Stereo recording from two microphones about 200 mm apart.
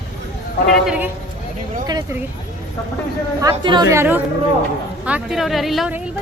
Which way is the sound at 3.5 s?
25° right (ahead or behind).